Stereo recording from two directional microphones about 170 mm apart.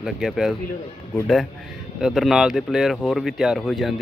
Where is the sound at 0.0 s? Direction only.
Centre (ahead or behind).